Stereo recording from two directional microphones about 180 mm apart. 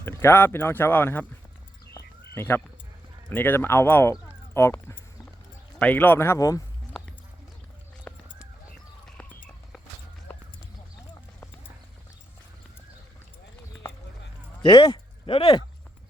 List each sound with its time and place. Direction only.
0.0 s speech: 15° left (ahead or behind)
2.3 s speech: 10° left (ahead or behind)
6.9 s a sound: 5° left (ahead or behind)
14.6 s speech: 25° left (ahead or behind)